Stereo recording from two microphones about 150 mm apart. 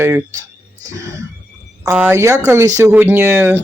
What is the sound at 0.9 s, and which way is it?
Neigh, 20° right (ahead or behind).